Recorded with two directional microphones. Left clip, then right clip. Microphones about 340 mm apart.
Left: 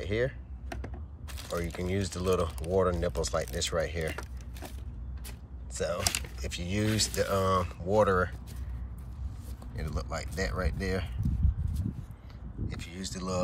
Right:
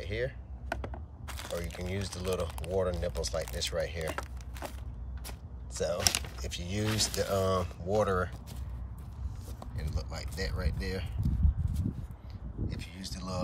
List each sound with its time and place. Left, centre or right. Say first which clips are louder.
0.0 s speech: left 4 dB; centre
1.5 s speech: left 5 dB; centre
5.9 s speech: right 2 dB; right
6.4 s speech: left 3 dB; centre
9.8 s speech: left 7 dB; centre
12.6 s a sound: left 3 dB; centre